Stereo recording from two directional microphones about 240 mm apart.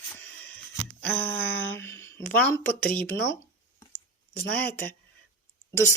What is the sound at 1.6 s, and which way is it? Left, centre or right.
Speech, centre.